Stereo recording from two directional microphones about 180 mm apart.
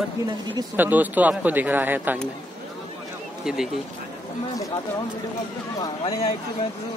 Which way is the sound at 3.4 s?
5° right (ahead or behind).